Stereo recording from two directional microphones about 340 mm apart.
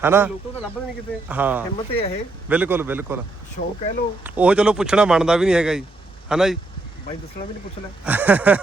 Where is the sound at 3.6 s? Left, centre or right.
Left.